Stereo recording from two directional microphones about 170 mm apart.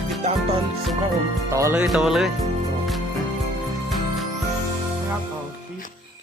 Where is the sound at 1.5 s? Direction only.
15° right (ahead or behind).